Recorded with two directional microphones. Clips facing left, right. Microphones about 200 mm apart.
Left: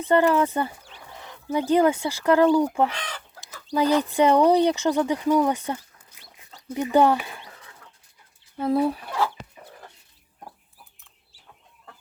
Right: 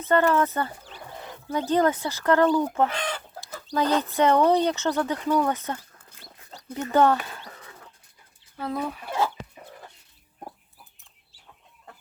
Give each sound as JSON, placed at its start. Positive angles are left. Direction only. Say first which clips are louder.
{"t": 0.0, "sound": "speech", "louder": "left 2 dB", "side_deg": 15}
{"t": 8.5, "sound": "speech", "louder": "left 8 dB", "side_deg": 30}